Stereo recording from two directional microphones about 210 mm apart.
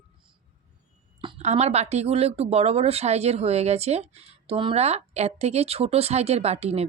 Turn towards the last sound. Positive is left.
turn(degrees=-30)  # may be behind; listen again after turning